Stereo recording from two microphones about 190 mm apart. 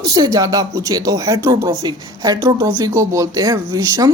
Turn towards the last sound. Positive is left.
turn(degrees=-20)  # may be behind; listen again after turning